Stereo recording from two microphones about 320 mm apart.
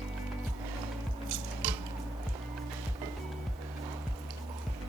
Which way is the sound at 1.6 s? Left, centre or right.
Centre.